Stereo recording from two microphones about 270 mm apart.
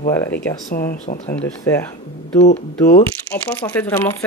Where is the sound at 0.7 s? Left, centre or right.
Left.